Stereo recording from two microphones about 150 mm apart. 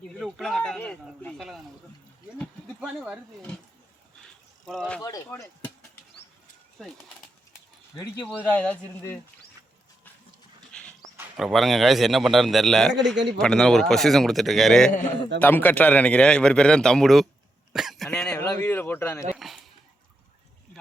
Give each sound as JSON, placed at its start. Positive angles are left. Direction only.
{"t": 0.2, "sound": "a sound", "side_deg": 0}
{"t": 2.8, "sound": "speech", "side_deg": -10}
{"t": 4.6, "sound": "a man's voice", "side_deg": 0}
{"t": 5.0, "sound": "speech", "side_deg": 20}
{"t": 8.3, "sound": "a man's voice", "side_deg": 10}
{"t": 10.7, "sound": "dog", "side_deg": 5}
{"t": 11.3, "sound": "a man's voice", "side_deg": 0}
{"t": 17.7, "sound": "a sound", "side_deg": -5}
{"t": 19.4, "sound": "a sound", "side_deg": 0}